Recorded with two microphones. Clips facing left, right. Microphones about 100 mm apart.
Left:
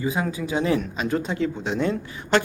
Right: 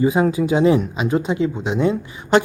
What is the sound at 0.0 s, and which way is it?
Speech, 30° right (ahead or behind).